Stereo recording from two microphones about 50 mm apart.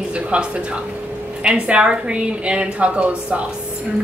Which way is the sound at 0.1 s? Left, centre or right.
Right.